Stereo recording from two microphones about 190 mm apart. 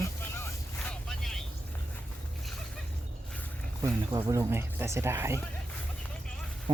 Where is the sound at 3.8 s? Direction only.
20° right (ahead or behind).